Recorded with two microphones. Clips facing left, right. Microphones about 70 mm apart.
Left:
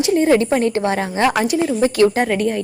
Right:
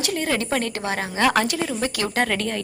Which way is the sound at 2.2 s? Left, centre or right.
Centre.